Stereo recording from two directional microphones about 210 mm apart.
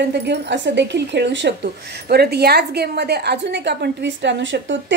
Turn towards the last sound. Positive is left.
turn(degrees=-60)  # may be behind; listen again after turning